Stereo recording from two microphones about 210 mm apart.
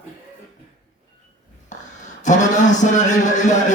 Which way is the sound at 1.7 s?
35° left (ahead or behind).